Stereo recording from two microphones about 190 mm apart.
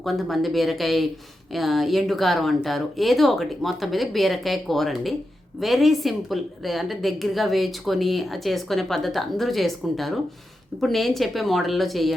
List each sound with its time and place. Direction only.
0.0 s a woman's voice: centre (ahead or behind)